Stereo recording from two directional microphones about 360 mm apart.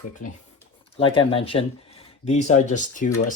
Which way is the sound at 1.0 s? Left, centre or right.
Centre.